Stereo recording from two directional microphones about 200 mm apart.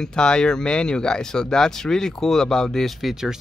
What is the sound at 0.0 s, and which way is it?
Speech, 5° left (ahead or behind).